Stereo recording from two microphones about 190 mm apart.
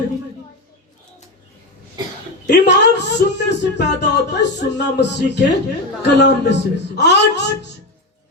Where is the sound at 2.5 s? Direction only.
65° left (ahead or behind).